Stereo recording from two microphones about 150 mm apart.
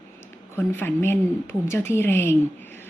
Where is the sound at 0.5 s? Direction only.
15° left (ahead or behind).